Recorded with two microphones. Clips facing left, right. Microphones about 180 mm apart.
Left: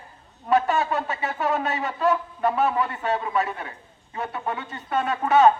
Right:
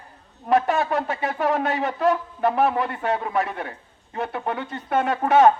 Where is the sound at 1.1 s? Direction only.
55° right (ahead or behind).